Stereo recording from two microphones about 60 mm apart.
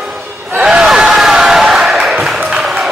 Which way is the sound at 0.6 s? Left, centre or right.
Centre.